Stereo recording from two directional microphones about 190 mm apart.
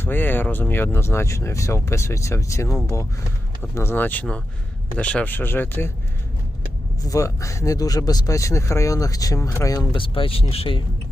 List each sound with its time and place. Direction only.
0.0 s speech: 10° left (ahead or behind)
7.0 s speech: 15° left (ahead or behind)